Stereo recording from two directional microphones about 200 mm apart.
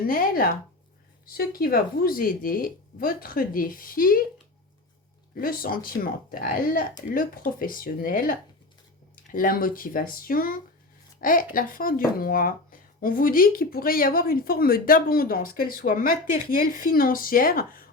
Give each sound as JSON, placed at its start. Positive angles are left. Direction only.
{"t": 0.0, "sound": "speech", "side_deg": 45}
{"t": 5.3, "sound": "a woman's voice", "side_deg": 45}